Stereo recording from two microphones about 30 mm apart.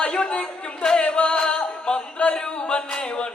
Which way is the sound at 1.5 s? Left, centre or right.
Left.